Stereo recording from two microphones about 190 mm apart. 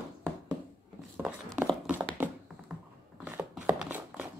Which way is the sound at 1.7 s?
10° right (ahead or behind).